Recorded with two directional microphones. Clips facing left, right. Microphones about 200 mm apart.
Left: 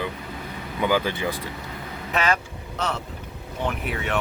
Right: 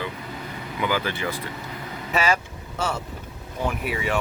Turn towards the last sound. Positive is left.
turn(degrees=0)  # may be behind; listen again after turning